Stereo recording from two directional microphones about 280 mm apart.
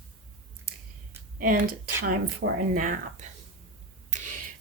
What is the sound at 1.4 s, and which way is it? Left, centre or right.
A woman's voice, right.